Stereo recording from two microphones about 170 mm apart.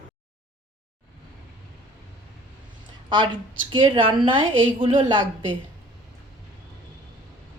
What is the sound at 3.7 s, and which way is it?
A woman's voice, 30° right (ahead or behind).